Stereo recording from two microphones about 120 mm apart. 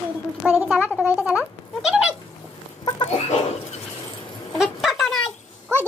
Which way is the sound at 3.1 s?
70° left (ahead or behind).